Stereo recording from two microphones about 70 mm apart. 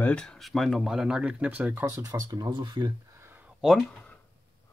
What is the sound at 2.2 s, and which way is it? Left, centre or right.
Speech, right.